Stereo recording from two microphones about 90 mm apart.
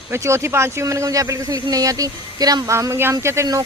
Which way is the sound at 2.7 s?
30° right (ahead or behind).